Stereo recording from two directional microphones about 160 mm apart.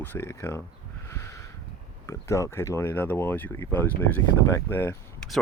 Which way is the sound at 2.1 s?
20° left (ahead or behind).